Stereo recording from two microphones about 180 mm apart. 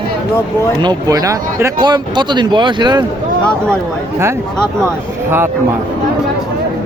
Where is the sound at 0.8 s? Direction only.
25° right (ahead or behind).